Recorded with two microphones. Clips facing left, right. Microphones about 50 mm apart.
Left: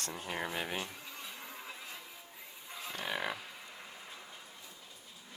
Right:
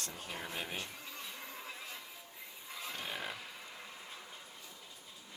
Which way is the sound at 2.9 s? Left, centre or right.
Left.